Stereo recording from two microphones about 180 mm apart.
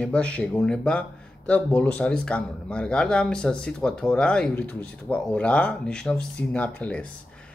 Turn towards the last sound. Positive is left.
turn(degrees=10)  # may be behind; listen again after turning